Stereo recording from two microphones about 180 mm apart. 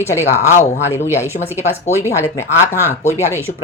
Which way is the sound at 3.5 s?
50° left (ahead or behind).